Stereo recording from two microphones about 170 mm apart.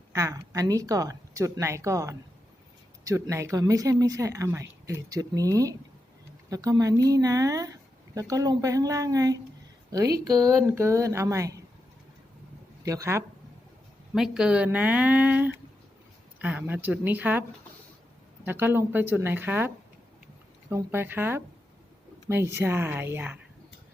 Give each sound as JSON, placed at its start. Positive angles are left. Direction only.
{"t": 0.1, "sound": "speech", "side_deg": -20}
{"t": 12.8, "sound": "speech", "side_deg": -20}
{"t": 14.1, "sound": "speech", "side_deg": -5}
{"t": 18.4, "sound": "speech", "side_deg": -15}